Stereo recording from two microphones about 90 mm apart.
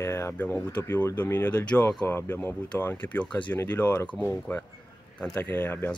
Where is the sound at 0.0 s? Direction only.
30° left (ahead or behind).